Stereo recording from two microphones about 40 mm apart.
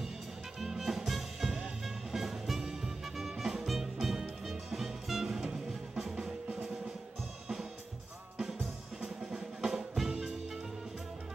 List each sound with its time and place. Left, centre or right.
0.6 s music: centre
9.2 s drum: centre